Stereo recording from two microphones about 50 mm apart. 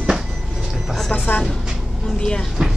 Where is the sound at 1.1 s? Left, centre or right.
Left.